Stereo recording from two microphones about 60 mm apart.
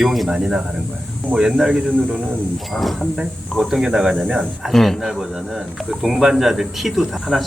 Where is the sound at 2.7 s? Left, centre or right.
Centre.